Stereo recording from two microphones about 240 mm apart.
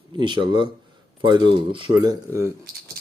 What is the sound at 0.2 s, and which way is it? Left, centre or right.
Speech, centre.